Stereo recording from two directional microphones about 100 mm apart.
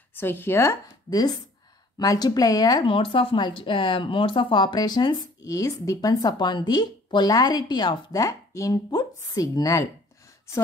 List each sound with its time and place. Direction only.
0.1 s speech: 20° left (ahead or behind)
1.1 s speech: 40° left (ahead or behind)
2.8 s speech: 60° left (ahead or behind); by 9.8 s 35° left (ahead or behind)